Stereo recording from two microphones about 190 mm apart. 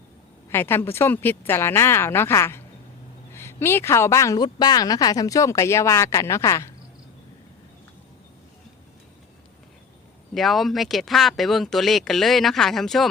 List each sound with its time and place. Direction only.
0.5 s speech: 10° left (ahead or behind)
10.3 s speech: centre (ahead or behind)